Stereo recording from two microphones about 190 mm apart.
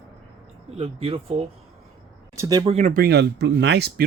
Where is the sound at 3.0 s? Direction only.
60° right (ahead or behind).